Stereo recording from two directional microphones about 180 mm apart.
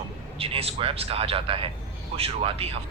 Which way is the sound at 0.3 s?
30° right (ahead or behind).